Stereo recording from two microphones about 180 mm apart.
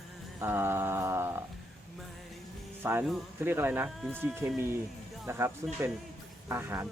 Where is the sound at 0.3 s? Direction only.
10° right (ahead or behind).